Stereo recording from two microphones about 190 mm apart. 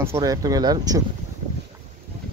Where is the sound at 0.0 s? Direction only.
15° right (ahead or behind).